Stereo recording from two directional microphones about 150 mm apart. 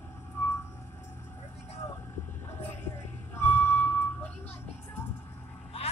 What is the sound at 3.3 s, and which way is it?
Music, 15° left (ahead or behind).